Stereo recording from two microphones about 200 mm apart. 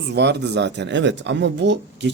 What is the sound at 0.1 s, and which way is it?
A man's voice, 55° right (ahead or behind).